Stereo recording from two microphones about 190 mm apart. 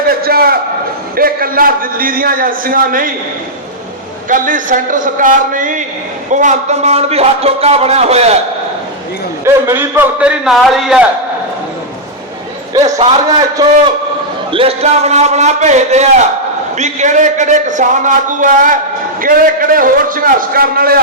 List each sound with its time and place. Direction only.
0.0 s a sound: 50° right (ahead or behind)
1.1 s a man's voice: 50° right (ahead or behind)
4.3 s a man's voice: 45° right (ahead or behind)
9.4 s a man's voice: 15° right (ahead or behind)
12.8 s a man's voice: 30° right (ahead or behind)
13.6 s a man's voice: 20° right (ahead or behind)
14.5 s a man's voice: 30° right (ahead or behind); by 21.0 s 50° right (ahead or behind)